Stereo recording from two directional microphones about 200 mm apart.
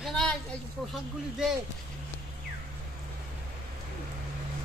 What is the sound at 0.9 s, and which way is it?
Speech, centre (ahead or behind).